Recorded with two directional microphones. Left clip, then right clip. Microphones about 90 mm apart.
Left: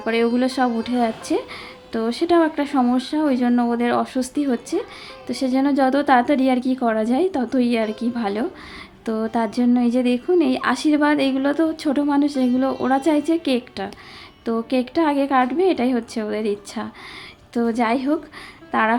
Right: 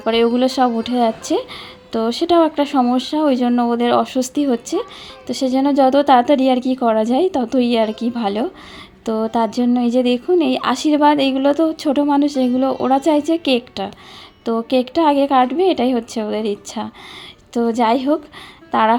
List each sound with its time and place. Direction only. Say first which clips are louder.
0.0 s a woman's voice: right 4 dB; 40° right (ahead or behind)